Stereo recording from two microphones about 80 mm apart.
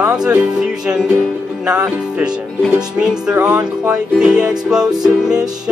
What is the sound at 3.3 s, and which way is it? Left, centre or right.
Music, centre.